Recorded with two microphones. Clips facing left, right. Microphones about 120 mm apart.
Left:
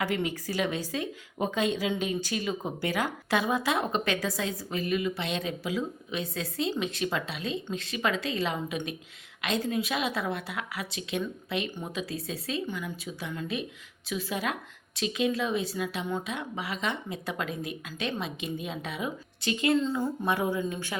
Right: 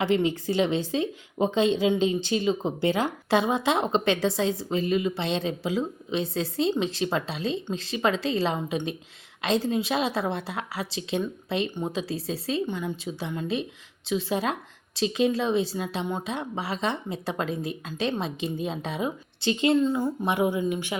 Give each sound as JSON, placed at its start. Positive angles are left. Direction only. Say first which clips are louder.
{"t": 0.0, "sound": "a woman's voice", "louder": "right 6 dB", "side_deg": -25}